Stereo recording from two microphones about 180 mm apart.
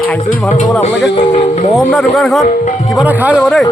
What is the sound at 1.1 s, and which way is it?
Speech, 40° left (ahead or behind).